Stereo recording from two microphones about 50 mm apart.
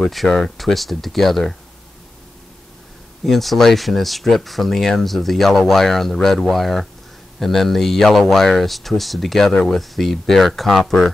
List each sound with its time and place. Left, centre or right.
0.1 s speech: centre
3.3 s speech: centre
9.5 s speech: centre
9.8 s speech: centre